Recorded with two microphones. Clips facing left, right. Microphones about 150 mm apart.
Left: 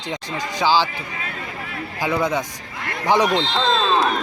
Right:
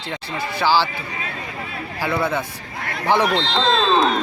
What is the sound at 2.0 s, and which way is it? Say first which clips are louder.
Speech: left 1 dB; 15° left (ahead or behind).